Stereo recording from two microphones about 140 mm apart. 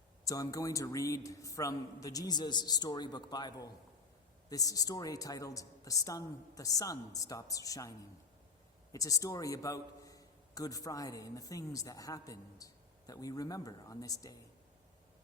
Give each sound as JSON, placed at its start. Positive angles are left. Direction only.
{"t": 0.3, "sound": "a man's voice", "side_deg": 25}